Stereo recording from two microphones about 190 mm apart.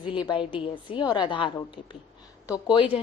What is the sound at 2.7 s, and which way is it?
Speech, 25° left (ahead or behind).